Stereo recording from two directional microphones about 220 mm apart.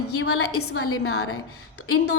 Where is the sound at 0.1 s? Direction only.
85° left.